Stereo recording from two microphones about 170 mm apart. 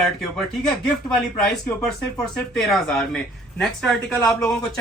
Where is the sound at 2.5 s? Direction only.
5° left (ahead or behind).